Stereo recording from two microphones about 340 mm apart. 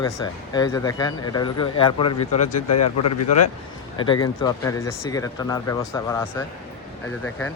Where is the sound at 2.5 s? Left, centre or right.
Left.